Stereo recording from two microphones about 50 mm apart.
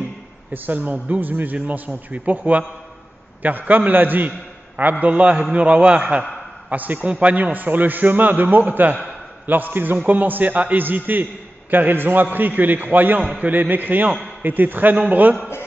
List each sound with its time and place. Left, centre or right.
0.5 s a man's voice: right
5.0 s a man's voice: right